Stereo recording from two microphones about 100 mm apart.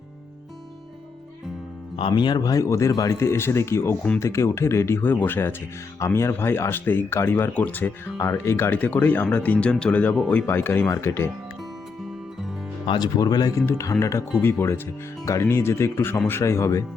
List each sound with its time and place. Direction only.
2.0 s speech: 55° left (ahead or behind); by 8.1 s 15° left (ahead or behind)
8.2 s speech: 30° left (ahead or behind)
12.9 s speech: 45° left (ahead or behind)